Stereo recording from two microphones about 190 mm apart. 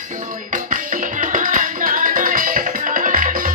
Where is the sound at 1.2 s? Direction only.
45° right (ahead or behind).